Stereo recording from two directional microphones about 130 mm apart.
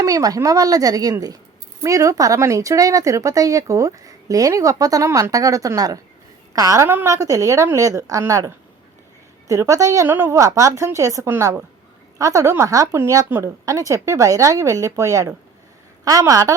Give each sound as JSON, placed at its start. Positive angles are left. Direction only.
{"t": 0.0, "sound": "speech", "side_deg": -25}